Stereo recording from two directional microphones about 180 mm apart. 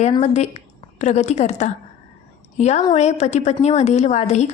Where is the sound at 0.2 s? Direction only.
40° left (ahead or behind).